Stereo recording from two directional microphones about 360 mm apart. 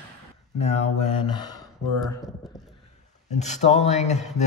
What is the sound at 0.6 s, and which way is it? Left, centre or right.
A man's voice, centre.